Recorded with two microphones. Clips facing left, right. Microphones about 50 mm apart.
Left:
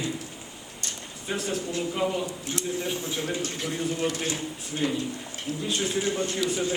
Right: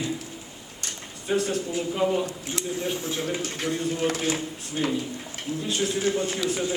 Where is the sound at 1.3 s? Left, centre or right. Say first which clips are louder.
Right 4 dB; centre.